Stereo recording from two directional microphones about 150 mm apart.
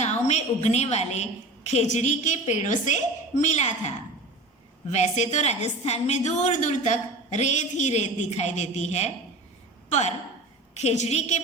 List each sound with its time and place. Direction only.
0.3 s a woman's voice: 50° left (ahead or behind)
10.8 s a woman's voice: 50° left (ahead or behind)